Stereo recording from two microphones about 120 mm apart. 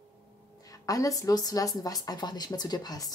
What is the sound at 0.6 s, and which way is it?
Speech, 30° left (ahead or behind).